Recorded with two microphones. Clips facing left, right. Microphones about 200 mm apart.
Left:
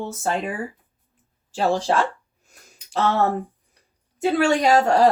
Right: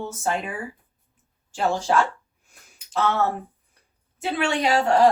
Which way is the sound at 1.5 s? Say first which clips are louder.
Left 3 dB; 35° left (ahead or behind).